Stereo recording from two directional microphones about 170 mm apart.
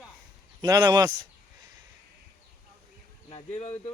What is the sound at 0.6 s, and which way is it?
Speech, 20° right (ahead or behind).